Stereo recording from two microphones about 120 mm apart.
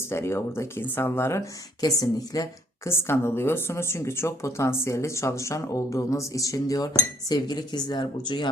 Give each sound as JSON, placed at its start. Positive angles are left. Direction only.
{"t": 0.1, "sound": "speech", "side_deg": 20}
{"t": 1.8, "sound": "speech", "side_deg": 30}